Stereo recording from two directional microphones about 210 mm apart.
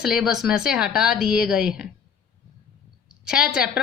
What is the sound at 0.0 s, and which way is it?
A woman's voice, centre (ahead or behind).